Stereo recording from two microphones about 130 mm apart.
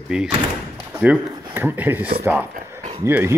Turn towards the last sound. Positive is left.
turn(degrees=-20)  # may be behind; listen again after turning